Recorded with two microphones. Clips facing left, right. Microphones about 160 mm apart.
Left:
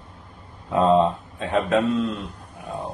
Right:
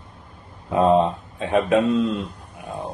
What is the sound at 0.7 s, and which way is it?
A man's voice, 15° right (ahead or behind).